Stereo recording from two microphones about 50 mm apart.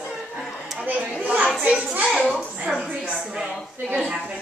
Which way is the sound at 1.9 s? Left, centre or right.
Right.